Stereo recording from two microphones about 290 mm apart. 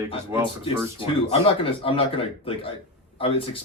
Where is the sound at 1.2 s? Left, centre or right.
Centre.